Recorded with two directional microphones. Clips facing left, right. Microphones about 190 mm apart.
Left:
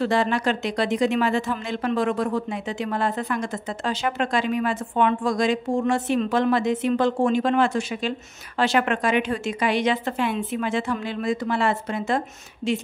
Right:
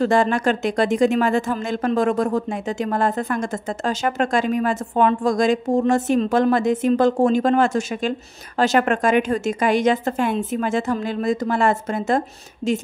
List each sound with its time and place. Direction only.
0.0 s speech: 45° right (ahead or behind)